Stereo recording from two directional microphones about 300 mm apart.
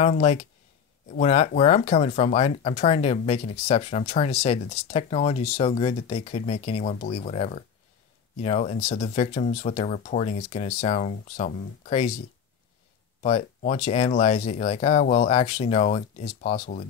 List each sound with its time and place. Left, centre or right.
0.0 s speech: left
13.2 s speech: left